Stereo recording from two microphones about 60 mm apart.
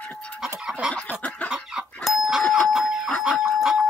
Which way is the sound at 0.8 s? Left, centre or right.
Centre.